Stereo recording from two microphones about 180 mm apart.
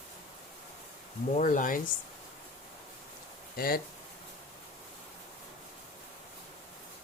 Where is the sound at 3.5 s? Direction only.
55° left (ahead or behind).